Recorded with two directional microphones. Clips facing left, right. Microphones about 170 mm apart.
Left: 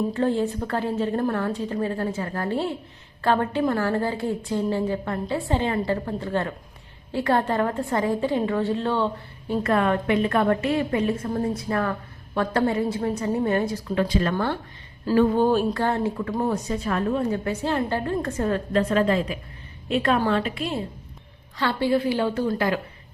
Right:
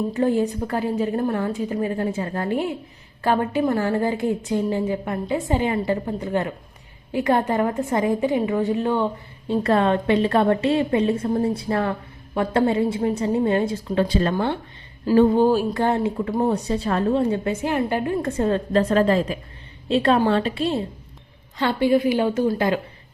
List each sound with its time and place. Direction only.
0.1 s a woman's voice: 15° right (ahead or behind)
9.5 s a woman's voice: 30° right (ahead or behind)
15.4 s a woman's voice: 10° right (ahead or behind)
17.6 s a woman's voice: 15° right (ahead or behind)
18.3 s a woman's voice: 25° right (ahead or behind)
18.7 s a woman's voice: 40° right (ahead or behind)
21.6 s a woman's voice: 15° right (ahead or behind)